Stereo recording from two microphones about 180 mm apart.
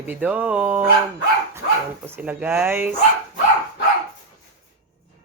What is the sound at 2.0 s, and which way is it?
Speech, 10° right (ahead or behind).